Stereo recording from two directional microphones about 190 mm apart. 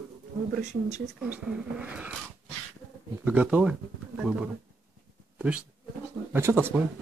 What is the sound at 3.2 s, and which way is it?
A man's voice, 10° right (ahead or behind).